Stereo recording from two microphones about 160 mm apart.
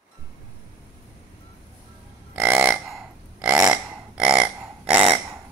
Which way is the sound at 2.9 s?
5° right (ahead or behind).